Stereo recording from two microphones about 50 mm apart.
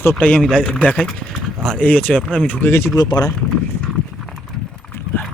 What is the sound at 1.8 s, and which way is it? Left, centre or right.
Speech, left.